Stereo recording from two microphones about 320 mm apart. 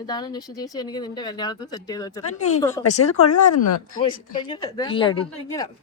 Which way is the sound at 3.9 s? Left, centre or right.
Centre.